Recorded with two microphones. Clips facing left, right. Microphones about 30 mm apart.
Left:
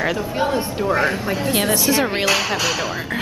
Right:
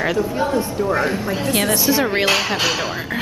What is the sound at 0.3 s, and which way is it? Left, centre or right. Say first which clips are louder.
Speech: right 1 dB; left.